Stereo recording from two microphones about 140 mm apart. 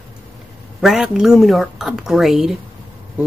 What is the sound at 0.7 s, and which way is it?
Speech, 5° right (ahead or behind).